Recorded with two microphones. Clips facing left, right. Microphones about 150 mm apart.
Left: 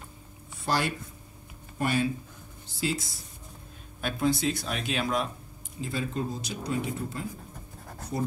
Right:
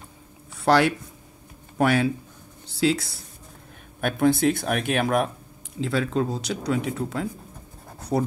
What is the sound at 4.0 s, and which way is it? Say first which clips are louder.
Speech: right 7 dB; 60° right (ahead or behind).